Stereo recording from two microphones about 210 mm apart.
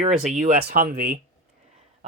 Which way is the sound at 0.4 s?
40° right (ahead or behind).